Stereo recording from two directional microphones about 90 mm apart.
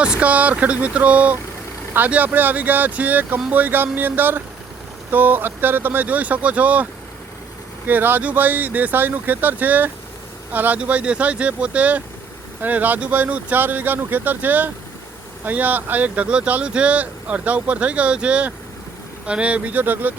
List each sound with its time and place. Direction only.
0.0 s speech: 15° right (ahead or behind)
7.9 s speech: 20° right (ahead or behind)